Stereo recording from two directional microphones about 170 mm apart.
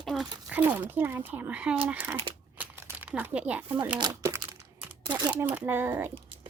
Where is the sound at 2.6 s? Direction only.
10° right (ahead or behind).